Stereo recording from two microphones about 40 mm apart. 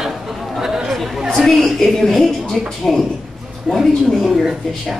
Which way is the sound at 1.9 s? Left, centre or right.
Centre.